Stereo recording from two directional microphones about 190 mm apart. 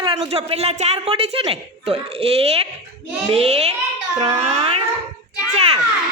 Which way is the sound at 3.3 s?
30° right (ahead or behind).